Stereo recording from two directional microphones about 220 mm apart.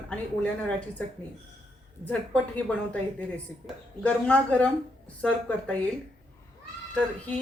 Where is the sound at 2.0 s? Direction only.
5° left (ahead or behind).